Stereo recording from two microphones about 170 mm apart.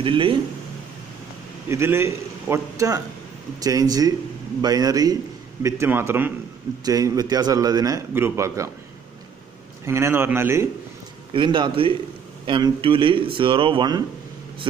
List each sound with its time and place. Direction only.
0.0 s speech: 30° right (ahead or behind)
1.7 s a man's voice: 15° right (ahead or behind)
9.8 s a man's voice: 15° right (ahead or behind)
11.3 s a man's voice: 30° right (ahead or behind)